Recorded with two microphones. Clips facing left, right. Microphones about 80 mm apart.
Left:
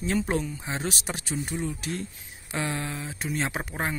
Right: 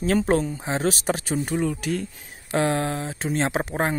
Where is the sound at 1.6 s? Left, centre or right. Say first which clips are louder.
Right 7 dB; right.